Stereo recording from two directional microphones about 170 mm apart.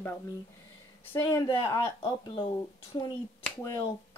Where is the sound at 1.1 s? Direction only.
15° left (ahead or behind).